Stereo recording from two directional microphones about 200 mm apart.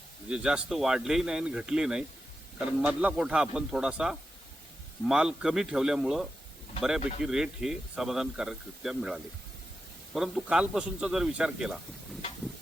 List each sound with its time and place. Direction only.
0.3 s speech: 5° right (ahead or behind)